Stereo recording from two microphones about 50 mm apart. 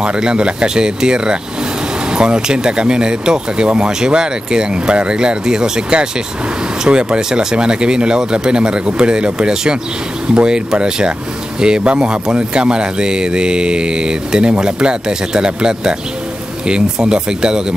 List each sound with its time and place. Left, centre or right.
0.0 s speech: centre